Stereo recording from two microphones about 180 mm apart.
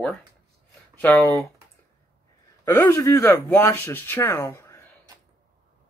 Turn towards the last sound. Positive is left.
turn(degrees=15)  # may be behind; listen again after turning